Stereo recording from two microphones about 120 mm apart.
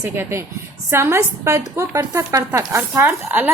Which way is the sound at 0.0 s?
20° right (ahead or behind).